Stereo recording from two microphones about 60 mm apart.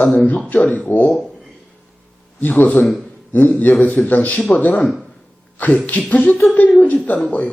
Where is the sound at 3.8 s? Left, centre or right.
Left.